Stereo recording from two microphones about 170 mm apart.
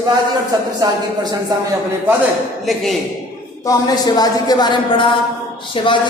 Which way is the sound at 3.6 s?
25° left (ahead or behind).